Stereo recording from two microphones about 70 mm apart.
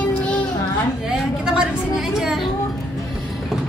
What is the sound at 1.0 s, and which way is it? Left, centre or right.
A woman's voice, centre.